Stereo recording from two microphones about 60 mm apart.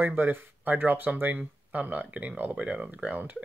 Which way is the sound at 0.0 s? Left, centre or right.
Right.